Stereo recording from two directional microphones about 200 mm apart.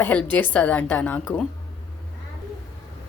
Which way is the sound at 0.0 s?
5° left (ahead or behind).